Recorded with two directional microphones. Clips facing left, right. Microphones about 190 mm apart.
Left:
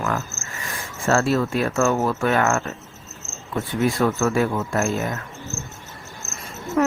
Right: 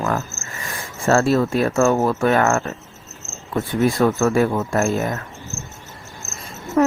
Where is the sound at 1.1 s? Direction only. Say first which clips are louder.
Right 3 dB; 40° right (ahead or behind).